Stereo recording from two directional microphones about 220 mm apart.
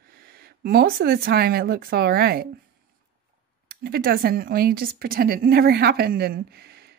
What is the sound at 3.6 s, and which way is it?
Speech, 45° right (ahead or behind).